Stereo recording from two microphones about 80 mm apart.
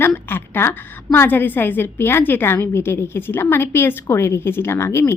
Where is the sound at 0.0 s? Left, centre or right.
Left.